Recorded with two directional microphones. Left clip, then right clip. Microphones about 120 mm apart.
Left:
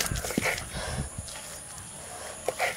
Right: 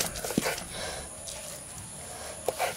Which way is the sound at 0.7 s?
10° right (ahead or behind).